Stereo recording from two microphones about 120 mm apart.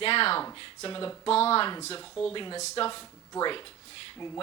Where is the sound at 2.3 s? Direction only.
40° left (ahead or behind).